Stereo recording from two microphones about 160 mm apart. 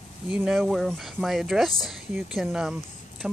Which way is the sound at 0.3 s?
5° right (ahead or behind).